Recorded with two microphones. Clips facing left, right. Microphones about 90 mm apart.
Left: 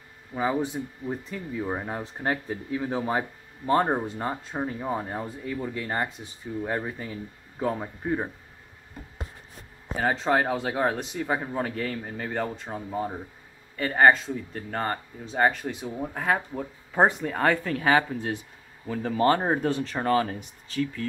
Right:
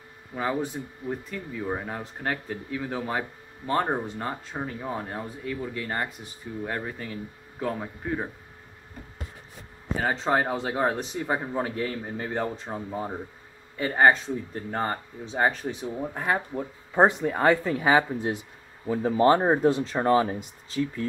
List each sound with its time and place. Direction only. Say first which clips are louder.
0.3 s speech: left 2 dB; 10° left (ahead or behind)
2.7 s speech: left 3 dB; 20° left (ahead or behind)
9.9 s speech: left 1 dB; centre (ahead or behind); by 20.3 s 15° right (ahead or behind)